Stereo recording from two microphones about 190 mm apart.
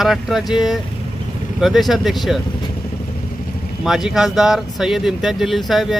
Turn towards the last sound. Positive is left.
turn(degrees=0)  # may be behind; listen again after turning